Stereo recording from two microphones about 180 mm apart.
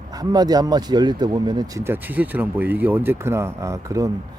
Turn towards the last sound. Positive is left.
turn(degrees=-15)  # may be behind; listen again after turning